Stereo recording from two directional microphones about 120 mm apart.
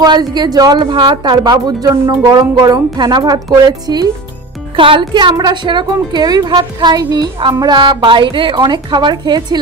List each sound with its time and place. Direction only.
0.0 s speech: 35° right (ahead or behind)
4.7 s speech: 45° right (ahead or behind)